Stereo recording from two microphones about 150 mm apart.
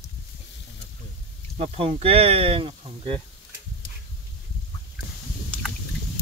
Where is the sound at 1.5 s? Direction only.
45° right (ahead or behind).